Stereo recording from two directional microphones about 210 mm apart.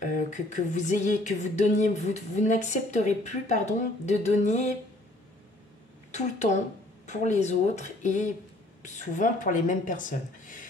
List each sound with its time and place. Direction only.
0.0 s speech: 35° left (ahead or behind)
6.1 s speech: 35° left (ahead or behind)